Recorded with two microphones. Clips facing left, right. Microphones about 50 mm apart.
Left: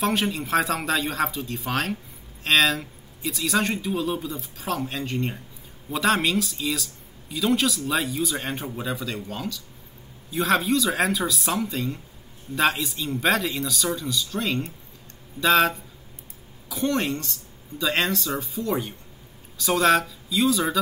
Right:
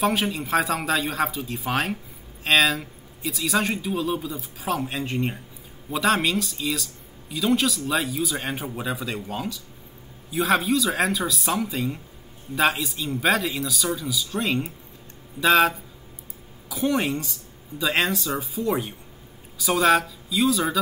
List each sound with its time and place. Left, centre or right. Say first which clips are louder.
0.0 s speech: right 1 dB; centre